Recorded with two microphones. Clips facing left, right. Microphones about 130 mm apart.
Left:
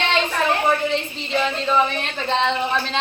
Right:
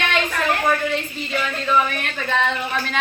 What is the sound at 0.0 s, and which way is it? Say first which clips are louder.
Speech: left 1 dB; 25° left (ahead or behind).